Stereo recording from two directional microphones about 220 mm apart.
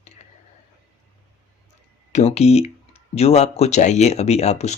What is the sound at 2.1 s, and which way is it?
Speech, 30° left (ahead or behind).